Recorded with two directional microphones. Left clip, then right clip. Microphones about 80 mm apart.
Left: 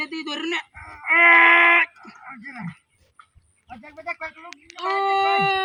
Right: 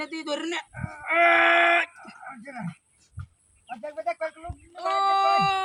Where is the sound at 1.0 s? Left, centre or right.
Centre.